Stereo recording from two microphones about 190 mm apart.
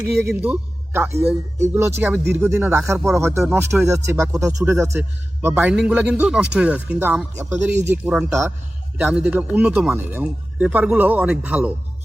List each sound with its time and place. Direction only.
0.3 s a man's voice: 10° right (ahead or behind)